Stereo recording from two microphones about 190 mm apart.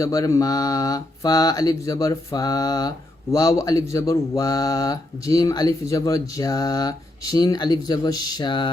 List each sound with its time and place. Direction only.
0.0 s speech: 15° left (ahead or behind)